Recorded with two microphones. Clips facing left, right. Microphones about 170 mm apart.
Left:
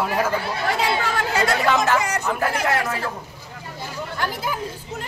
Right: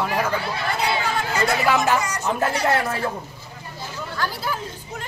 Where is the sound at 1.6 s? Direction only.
15° right (ahead or behind).